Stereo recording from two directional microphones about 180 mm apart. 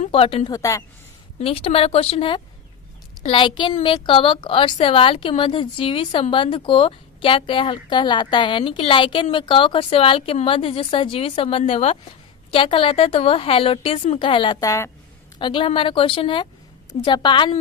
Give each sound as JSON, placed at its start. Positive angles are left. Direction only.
{"t": 0.0, "sound": "speech", "side_deg": 30}
{"t": 0.5, "sound": "speech", "side_deg": 20}
{"t": 1.4, "sound": "a woman's voice", "side_deg": 30}